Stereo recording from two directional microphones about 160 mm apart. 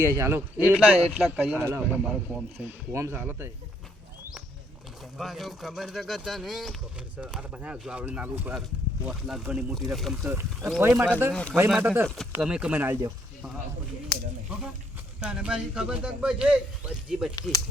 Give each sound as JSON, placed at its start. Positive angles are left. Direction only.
{"t": 0.2, "sound": "speech", "side_deg": -15}
{"t": 5.1, "sound": "speech", "side_deg": 0}
{"t": 10.2, "sound": "speech", "side_deg": -15}
{"t": 12.0, "sound": "speech", "side_deg": 5}
{"t": 15.2, "sound": "speech", "side_deg": -5}